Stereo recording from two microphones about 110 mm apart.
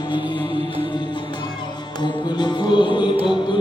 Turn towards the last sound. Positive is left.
turn(degrees=45)  # may be behind; listen again after turning